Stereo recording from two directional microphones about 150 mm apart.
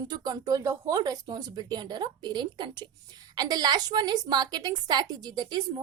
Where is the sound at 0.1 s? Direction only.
25° right (ahead or behind).